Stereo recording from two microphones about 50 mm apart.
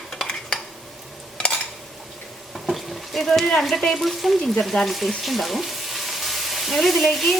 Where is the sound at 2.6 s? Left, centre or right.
Centre.